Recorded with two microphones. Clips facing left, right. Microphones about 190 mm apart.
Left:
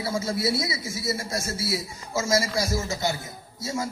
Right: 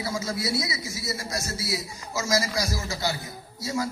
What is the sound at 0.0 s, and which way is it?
A man's voice, 25° left (ahead or behind).